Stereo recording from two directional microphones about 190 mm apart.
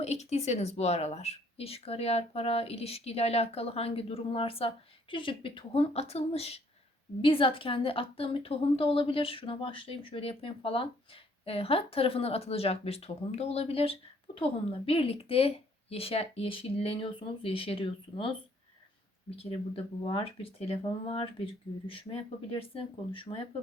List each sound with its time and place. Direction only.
0.0 s a woman's voice: 35° left (ahead or behind)
19.4 s a woman's voice: 30° left (ahead or behind)